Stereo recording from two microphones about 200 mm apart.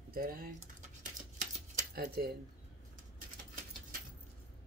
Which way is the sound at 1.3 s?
45° right (ahead or behind).